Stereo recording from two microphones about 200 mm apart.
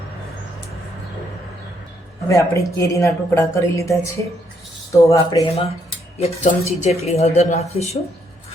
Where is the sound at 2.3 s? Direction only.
15° left (ahead or behind).